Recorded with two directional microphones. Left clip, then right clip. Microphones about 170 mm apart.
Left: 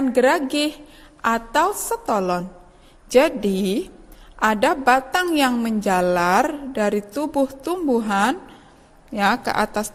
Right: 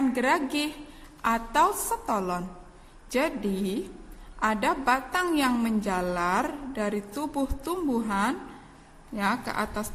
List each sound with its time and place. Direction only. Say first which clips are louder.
0.1 s a woman's voice: left 8 dB; 35° left (ahead or behind)